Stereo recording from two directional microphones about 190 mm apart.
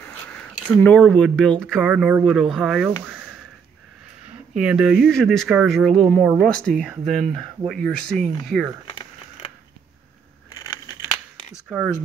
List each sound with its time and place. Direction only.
0.3 s speech: 5° left (ahead or behind)
4.6 s speech: 5° right (ahead or behind)
8.8 s a sound: 30° left (ahead or behind)